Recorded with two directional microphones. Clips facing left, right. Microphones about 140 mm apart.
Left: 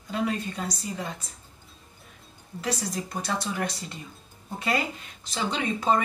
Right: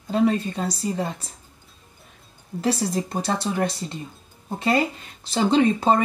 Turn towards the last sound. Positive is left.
turn(degrees=-30)  # may be behind; listen again after turning